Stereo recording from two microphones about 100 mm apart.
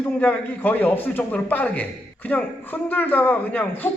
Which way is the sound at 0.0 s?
20° left (ahead or behind).